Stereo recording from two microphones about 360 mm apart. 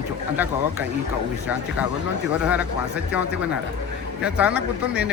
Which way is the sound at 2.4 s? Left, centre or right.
Centre.